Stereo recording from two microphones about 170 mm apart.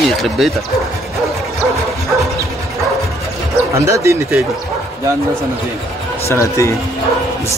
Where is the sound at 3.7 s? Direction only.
15° right (ahead or behind).